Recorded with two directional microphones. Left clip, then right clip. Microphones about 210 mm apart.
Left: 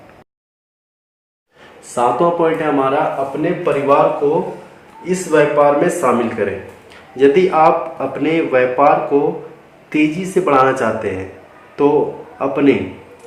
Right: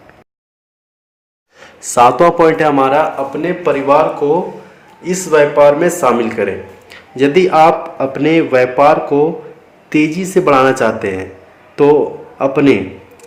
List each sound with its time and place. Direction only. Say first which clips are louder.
2.0 s a man's voice: right 6 dB; 50° right (ahead or behind)